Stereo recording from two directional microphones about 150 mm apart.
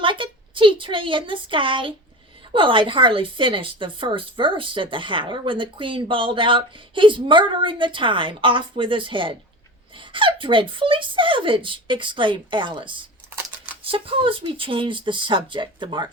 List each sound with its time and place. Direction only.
0.0 s a woman's voice: 35° right (ahead or behind)